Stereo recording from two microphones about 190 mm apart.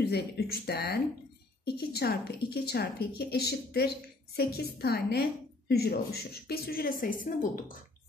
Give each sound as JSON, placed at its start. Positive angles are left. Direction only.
{"t": 0.0, "sound": "a woman's voice", "side_deg": 55}